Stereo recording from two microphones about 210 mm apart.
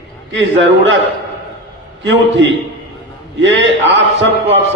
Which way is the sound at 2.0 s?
60° right (ahead or behind).